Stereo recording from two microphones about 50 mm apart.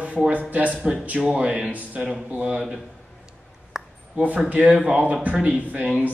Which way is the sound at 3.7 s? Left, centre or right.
Centre.